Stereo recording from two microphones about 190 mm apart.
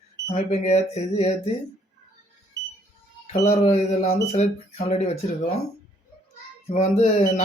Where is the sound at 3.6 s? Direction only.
40° left (ahead or behind).